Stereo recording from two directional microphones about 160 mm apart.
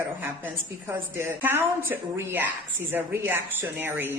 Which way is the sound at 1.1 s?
15° right (ahead or behind).